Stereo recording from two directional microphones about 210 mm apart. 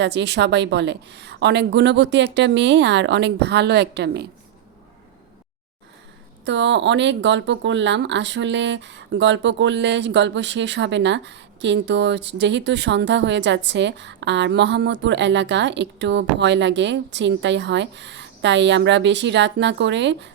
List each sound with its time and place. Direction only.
0.0 s speech: 55° right (ahead or behind)
6.4 s speech: 60° right (ahead or behind)